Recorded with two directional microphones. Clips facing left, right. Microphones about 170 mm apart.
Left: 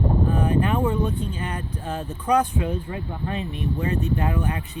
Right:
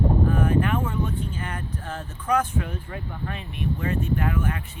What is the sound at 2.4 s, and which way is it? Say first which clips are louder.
Speech: left 4 dB; 20° left (ahead or behind).